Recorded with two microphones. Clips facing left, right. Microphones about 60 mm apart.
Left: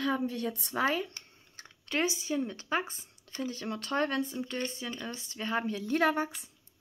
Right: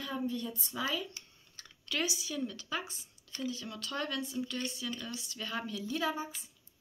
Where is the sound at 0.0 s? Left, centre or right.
Left.